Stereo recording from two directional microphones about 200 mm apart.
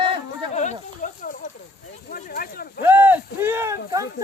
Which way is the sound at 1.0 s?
40° left (ahead or behind).